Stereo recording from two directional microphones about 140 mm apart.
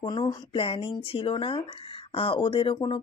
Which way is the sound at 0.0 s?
35° left (ahead or behind).